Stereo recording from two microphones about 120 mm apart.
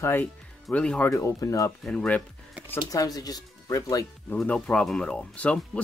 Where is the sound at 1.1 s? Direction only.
25° left (ahead or behind).